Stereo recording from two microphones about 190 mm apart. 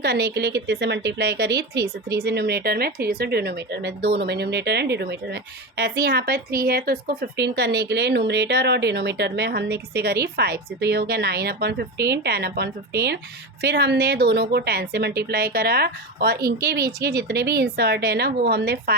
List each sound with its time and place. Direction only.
0.0 s a woman's voice: 60° right (ahead or behind)